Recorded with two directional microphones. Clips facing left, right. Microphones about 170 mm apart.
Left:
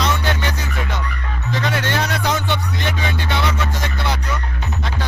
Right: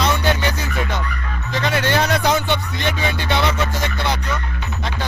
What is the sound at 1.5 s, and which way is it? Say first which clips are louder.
Music: right 3 dB; centre (ahead or behind).